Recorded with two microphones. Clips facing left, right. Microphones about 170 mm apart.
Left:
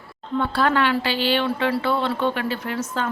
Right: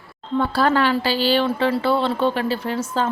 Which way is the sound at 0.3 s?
35° right (ahead or behind).